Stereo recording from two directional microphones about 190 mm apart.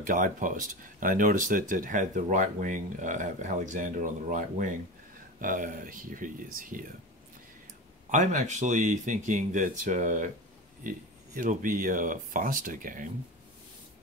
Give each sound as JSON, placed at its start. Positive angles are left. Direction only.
{"t": 0.0, "sound": "speech", "side_deg": -45}
{"t": 8.1, "sound": "speech", "side_deg": -40}